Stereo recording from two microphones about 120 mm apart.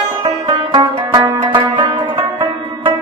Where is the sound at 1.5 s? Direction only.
40° right (ahead or behind).